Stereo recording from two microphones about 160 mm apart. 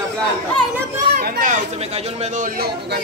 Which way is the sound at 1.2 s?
60° right (ahead or behind).